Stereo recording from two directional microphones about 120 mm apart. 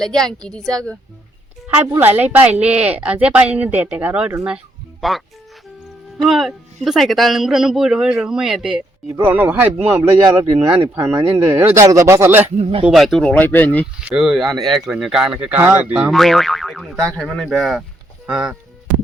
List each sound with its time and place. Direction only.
0.0 s a man's voice: 5° left (ahead or behind)
1.7 s speech: 15° right (ahead or behind)
4.4 s a sound: 5° right (ahead or behind)
6.2 s a man's voice: centre (ahead or behind)
9.0 s speech: 20° right (ahead or behind)
10.0 s speech: 30° right (ahead or behind)
12.8 s speech: centre (ahead or behind); by 13.8 s 15° left (ahead or behind)
14.1 s a man's voice: 5° right (ahead or behind)
16.1 s a man's voice: centre (ahead or behind)